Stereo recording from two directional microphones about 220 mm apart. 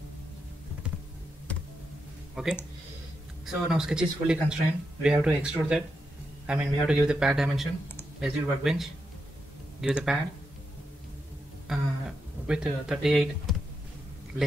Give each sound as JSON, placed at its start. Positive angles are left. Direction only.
{"t": 2.4, "sound": "a man's voice", "side_deg": -5}
{"t": 11.7, "sound": "a man's voice", "side_deg": 0}